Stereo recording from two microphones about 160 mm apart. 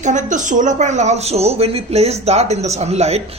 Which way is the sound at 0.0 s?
50° right (ahead or behind).